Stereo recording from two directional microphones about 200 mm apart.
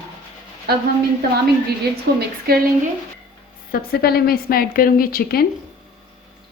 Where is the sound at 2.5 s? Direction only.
50° right (ahead or behind).